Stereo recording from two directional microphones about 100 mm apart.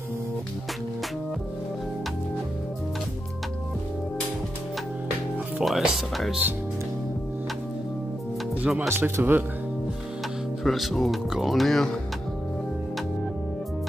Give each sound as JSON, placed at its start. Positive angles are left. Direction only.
{"t": 5.6, "sound": "speech", "side_deg": 0}
{"t": 8.7, "sound": "speech", "side_deg": -20}
{"t": 10.6, "sound": "speech", "side_deg": 0}